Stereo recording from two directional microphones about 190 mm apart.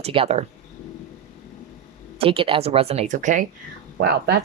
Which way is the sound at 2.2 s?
30° right (ahead or behind).